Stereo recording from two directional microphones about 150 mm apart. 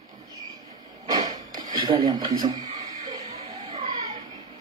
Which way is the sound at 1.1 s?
25° right (ahead or behind).